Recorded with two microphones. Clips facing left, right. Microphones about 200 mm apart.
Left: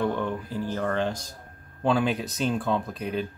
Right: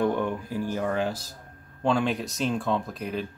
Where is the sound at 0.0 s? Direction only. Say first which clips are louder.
Right 2 dB; 15° right (ahead or behind).